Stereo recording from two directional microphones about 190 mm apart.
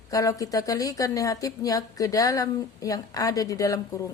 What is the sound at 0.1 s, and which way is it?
A woman's voice, 20° left (ahead or behind).